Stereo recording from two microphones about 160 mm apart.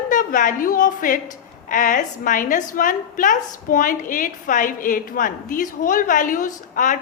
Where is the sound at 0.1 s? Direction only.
55° left (ahead or behind).